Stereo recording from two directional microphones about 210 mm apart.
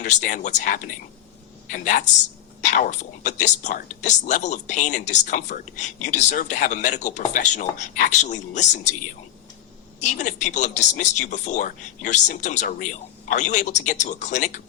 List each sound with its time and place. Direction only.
0.2 s speech: 35° left (ahead or behind)
10.0 s speech: 35° left (ahead or behind)